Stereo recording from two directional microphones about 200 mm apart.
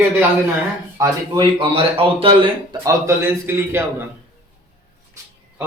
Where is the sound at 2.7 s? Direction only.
15° right (ahead or behind).